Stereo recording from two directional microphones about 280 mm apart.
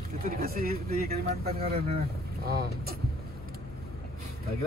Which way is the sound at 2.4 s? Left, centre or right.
Right.